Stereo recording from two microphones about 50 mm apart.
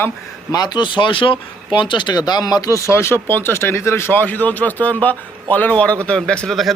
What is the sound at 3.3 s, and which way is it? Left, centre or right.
Speech, left.